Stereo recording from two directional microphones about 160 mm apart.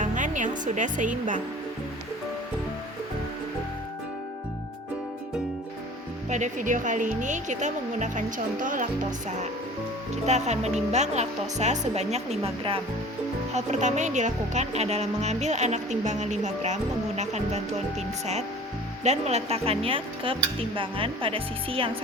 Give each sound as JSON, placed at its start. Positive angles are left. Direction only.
{"t": 0.0, "sound": "music", "side_deg": -55}
{"t": 6.3, "sound": "a woman's voice", "side_deg": -50}
{"t": 10.2, "sound": "a woman's voice", "side_deg": -45}
{"t": 19.0, "sound": "speech", "side_deg": -45}